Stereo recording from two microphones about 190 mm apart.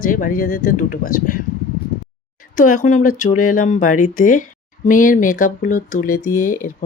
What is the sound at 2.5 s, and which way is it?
Speech, 45° left (ahead or behind).